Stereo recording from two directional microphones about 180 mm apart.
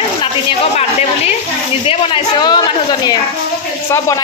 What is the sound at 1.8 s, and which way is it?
Speech, 25° left (ahead or behind).